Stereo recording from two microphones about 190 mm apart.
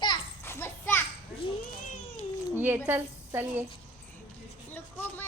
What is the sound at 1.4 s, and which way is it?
Cat, 30° left (ahead or behind).